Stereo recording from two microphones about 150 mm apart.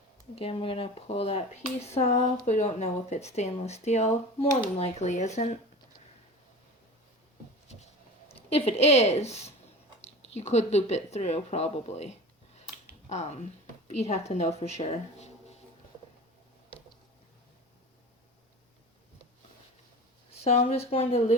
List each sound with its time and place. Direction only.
0.3 s speech: 40° left (ahead or behind)
7.7 s a sound: 45° left (ahead or behind)
8.3 s a woman's voice: 40° left (ahead or behind)
20.4 s speech: 45° left (ahead or behind)